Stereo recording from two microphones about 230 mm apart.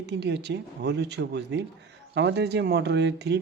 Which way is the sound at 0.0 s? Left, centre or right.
Right.